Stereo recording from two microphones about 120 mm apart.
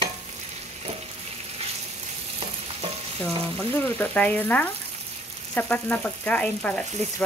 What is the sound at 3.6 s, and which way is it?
Speech, 10° left (ahead or behind).